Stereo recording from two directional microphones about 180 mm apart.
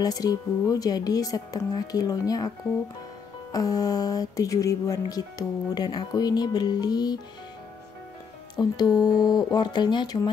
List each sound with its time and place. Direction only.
0.0 s speech: 20° left (ahead or behind)
3.5 s speech: 20° left (ahead or behind)
8.5 s speech: 20° left (ahead or behind)